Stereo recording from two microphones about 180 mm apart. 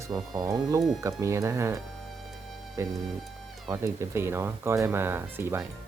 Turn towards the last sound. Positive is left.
turn(degrees=-10)  # may be behind; listen again after turning